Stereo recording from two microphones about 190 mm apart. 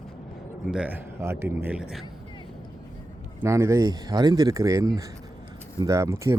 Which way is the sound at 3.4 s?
15° right (ahead or behind).